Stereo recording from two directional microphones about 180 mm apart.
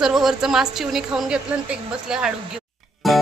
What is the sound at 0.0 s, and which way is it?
A child's voice, centre (ahead or behind).